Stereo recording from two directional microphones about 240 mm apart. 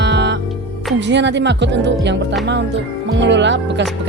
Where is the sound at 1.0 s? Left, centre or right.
Right.